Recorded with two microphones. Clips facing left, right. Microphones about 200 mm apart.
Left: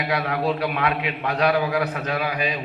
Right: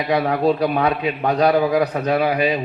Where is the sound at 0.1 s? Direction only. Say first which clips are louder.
Right 7 dB; 35° right (ahead or behind).